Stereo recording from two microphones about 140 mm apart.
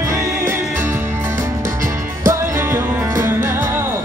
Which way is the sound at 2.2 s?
20° right (ahead or behind).